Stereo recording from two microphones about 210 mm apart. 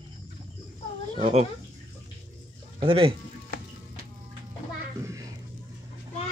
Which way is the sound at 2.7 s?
25° right (ahead or behind).